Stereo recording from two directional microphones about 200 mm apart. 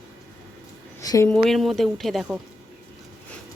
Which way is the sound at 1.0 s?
15° left (ahead or behind).